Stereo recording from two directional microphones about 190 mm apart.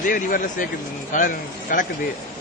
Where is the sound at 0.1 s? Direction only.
45° left (ahead or behind).